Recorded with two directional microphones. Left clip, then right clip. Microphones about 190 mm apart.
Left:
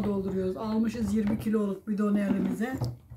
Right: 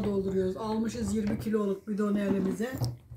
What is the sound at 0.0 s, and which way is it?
Speech, centre (ahead or behind).